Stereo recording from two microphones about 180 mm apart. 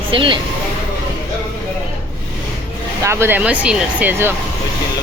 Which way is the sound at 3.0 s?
15° right (ahead or behind).